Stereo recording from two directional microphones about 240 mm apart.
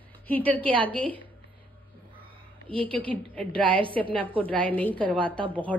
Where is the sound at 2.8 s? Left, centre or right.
Centre.